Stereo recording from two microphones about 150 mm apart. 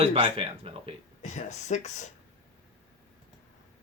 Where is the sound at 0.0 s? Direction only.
35° right (ahead or behind).